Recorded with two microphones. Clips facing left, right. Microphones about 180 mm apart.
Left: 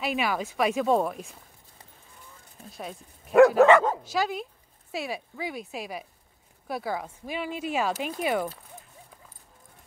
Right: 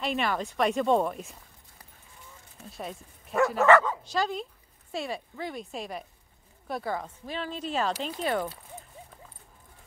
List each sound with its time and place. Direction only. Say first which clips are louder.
0.0 s speech: left 1 dB; 5° left (ahead or behind)
2.6 s speech: even; centre (ahead or behind)
3.3 s dog: left 9 dB; 60° left (ahead or behind)
4.0 s speech: left 1 dB; 5° left (ahead or behind)